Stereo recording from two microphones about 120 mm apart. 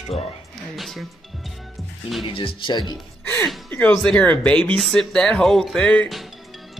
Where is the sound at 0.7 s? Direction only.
Centre (ahead or behind).